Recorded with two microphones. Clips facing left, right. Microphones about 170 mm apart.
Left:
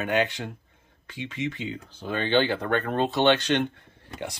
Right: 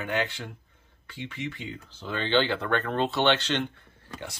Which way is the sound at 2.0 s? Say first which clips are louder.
Left 3 dB; 50° left (ahead or behind).